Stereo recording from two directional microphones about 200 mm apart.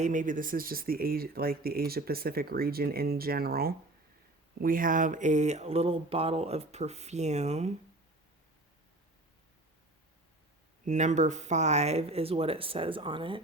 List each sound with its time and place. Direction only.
0.0 s speech: 40° right (ahead or behind)
10.8 s speech: 35° right (ahead or behind)